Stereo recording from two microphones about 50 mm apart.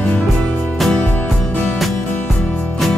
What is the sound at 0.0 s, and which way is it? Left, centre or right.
Music, left.